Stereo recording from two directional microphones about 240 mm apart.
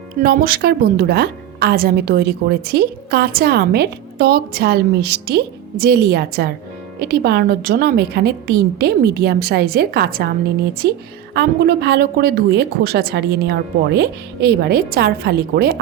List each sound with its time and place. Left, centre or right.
0.2 s a woman's voice: right